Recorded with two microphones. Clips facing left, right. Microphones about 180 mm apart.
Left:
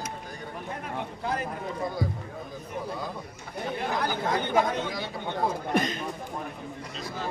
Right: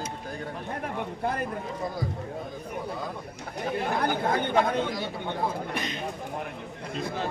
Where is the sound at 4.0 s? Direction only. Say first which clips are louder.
Right 1 dB; 55° right (ahead or behind).